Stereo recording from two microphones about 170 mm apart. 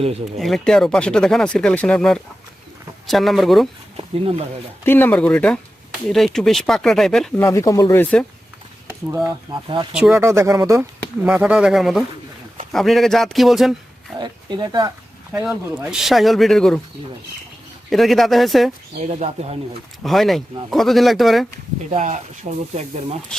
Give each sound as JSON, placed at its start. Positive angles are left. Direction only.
{"t": 0.3, "sound": "speech", "side_deg": 0}
{"t": 3.9, "sound": "speech", "side_deg": -35}
{"t": 4.8, "sound": "speech", "side_deg": 10}
{"t": 7.4, "sound": "speech", "side_deg": 20}
{"t": 9.2, "sound": "speech", "side_deg": -30}
{"t": 9.9, "sound": "speech", "side_deg": -5}
{"t": 10.2, "sound": "speech", "side_deg": -15}
{"t": 14.2, "sound": "speech", "side_deg": -25}
{"t": 15.3, "sound": "speech", "side_deg": -5}
{"t": 17.9, "sound": "speech", "side_deg": 0}
{"t": 18.9, "sound": "speech", "side_deg": -40}
{"t": 20.0, "sound": "speech", "side_deg": 0}
{"t": 21.8, "sound": "speech", "side_deg": -45}